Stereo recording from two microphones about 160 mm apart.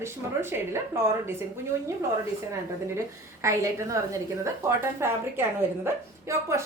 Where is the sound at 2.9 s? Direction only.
15° right (ahead or behind).